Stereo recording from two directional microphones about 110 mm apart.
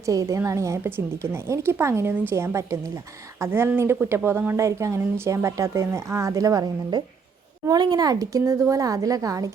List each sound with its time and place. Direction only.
0.0 s speech: 30° right (ahead or behind)